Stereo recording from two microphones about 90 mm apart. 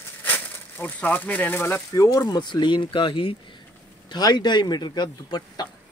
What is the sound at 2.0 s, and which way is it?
Speech, 45° left (ahead or behind).